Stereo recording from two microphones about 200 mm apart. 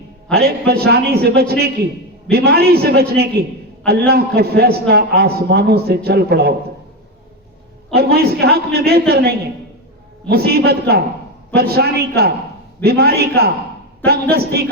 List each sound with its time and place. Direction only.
0.3 s a man's voice: 50° right (ahead or behind)
7.9 s a man's voice: 50° right (ahead or behind)